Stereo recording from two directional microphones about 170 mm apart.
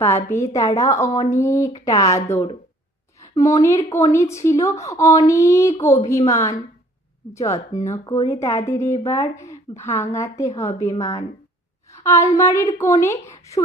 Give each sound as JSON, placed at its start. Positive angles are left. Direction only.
{"t": 0.5, "sound": "speech", "side_deg": 20}